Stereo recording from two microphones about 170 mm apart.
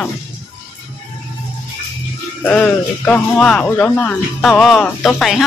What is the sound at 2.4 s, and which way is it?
Speech, 10° left (ahead or behind).